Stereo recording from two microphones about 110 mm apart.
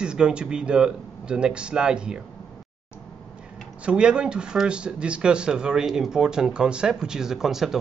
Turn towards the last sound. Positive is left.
turn(degrees=-5)  # may be behind; listen again after turning